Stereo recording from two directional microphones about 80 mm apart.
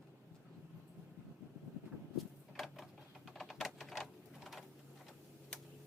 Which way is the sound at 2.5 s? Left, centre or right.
Centre.